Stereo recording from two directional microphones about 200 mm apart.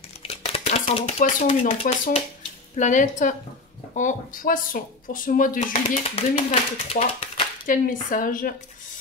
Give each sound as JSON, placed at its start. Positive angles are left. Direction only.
{"t": 0.2, "sound": "chopping", "side_deg": 30}
{"t": 2.7, "sound": "speech", "side_deg": 40}